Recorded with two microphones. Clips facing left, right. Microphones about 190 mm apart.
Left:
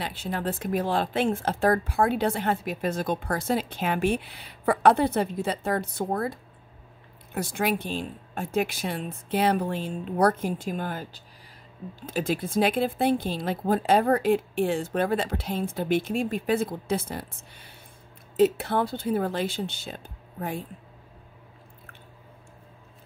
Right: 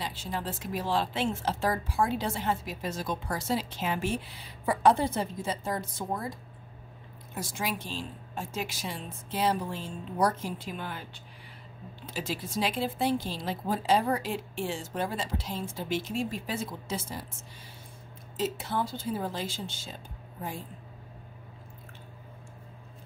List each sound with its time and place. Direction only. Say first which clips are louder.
0.0 s speech: left 5 dB; 60° left (ahead or behind)
7.3 s speech: left 7 dB; 60° left (ahead or behind); by 11.1 s 45° left (ahead or behind)
12.1 s speech: left 7 dB; 50° left (ahead or behind)